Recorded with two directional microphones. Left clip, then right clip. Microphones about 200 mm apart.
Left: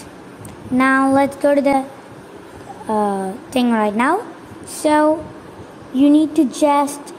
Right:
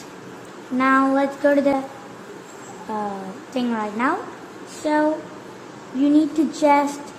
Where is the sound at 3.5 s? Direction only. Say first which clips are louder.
Left 7 dB; 30° left (ahead or behind).